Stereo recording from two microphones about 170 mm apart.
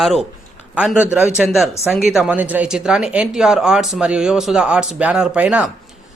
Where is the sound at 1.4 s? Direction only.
Centre (ahead or behind).